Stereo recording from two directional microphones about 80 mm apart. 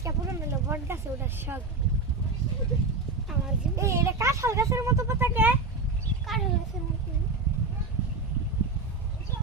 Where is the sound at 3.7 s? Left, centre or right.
Right.